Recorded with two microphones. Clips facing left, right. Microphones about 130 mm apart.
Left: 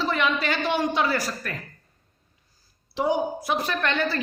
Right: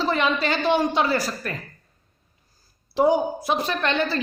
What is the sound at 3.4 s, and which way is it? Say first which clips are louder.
Speech: right 2 dB; 25° right (ahead or behind).